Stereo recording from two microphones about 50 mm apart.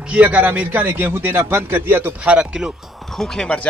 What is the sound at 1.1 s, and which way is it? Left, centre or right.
Speech, right.